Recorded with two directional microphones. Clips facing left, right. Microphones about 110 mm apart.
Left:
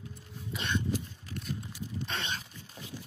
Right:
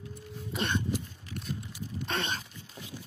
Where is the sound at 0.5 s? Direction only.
50° right (ahead or behind).